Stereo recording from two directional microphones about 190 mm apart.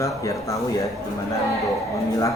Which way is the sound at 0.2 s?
15° left (ahead or behind).